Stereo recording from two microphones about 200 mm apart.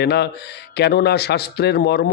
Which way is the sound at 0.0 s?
55° left (ahead or behind).